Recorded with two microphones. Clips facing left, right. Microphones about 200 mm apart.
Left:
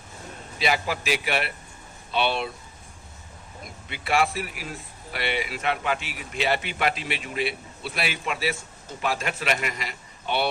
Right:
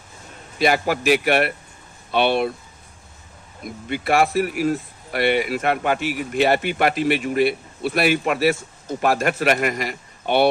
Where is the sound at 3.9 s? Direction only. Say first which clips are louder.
Right 6 dB; 45° right (ahead or behind).